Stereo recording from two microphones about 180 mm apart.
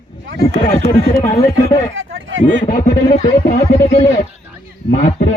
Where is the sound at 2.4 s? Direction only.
50° left (ahead or behind).